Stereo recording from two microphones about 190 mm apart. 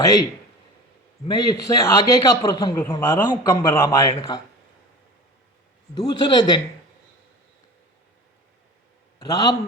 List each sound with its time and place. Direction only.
0.0 s a man's voice: 20° left (ahead or behind)
1.3 s a man's voice: 20° left (ahead or behind)
5.9 s a man's voice: 20° left (ahead or behind)
9.1 s a man's voice: 20° left (ahead or behind)